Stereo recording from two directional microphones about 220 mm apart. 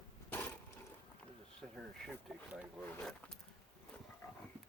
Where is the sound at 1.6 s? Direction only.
Centre (ahead or behind).